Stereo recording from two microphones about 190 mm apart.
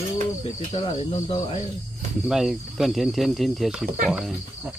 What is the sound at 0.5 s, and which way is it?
Cricket, 35° left (ahead or behind).